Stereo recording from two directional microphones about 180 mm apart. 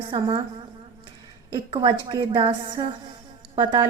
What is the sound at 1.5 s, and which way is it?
A woman's voice, 25° right (ahead or behind).